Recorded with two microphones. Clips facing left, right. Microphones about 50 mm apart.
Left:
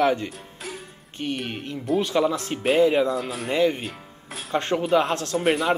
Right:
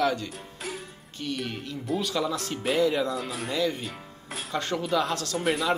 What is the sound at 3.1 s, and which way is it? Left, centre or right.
Speech, centre.